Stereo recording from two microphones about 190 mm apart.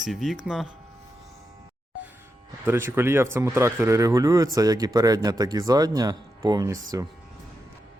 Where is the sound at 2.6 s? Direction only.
10° right (ahead or behind).